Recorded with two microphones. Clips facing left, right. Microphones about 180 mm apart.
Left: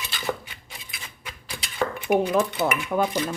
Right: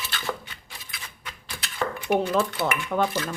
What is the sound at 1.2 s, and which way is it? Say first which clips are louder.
Speech: left 2 dB; 10° left (ahead or behind).